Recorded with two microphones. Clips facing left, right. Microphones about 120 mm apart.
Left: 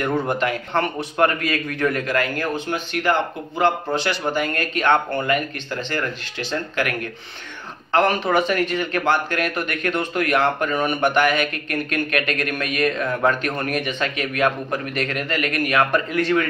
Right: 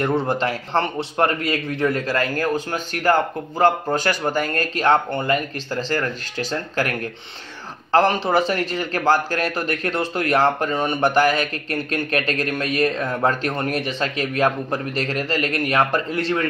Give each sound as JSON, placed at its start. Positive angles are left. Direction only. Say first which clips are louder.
{"t": 0.0, "sound": "a man's voice", "louder": "right 1 dB", "side_deg": -30}